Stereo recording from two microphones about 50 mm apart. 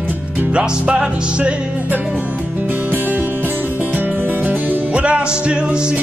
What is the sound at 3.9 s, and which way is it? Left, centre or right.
Music, right.